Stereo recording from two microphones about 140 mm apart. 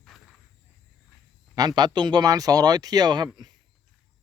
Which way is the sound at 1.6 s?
30° right (ahead or behind).